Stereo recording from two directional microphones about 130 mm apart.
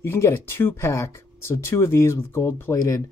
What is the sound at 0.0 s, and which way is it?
Speech, 20° left (ahead or behind).